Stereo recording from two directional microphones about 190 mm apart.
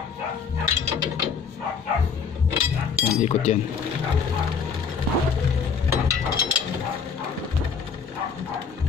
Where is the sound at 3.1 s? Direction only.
35° left (ahead or behind).